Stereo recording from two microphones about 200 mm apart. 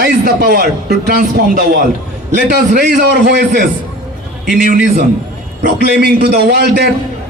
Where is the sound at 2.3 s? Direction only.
45° right (ahead or behind).